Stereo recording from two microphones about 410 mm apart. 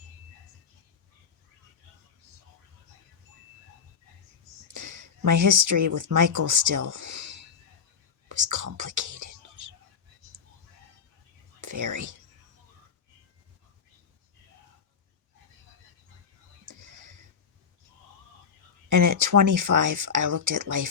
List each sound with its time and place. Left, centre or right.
4.7 s speech: right
8.4 s whispering: right
11.6 s whispering: right
16.6 s a sound: right
18.9 s speech: right